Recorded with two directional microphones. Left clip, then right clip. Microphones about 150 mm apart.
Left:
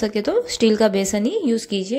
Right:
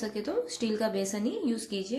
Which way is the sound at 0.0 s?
55° left (ahead or behind).